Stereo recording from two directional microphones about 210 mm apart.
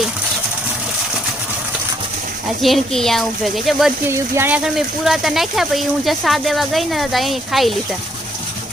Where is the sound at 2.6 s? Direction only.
Centre (ahead or behind).